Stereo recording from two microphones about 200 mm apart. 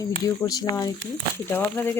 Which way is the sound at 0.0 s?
15° left (ahead or behind).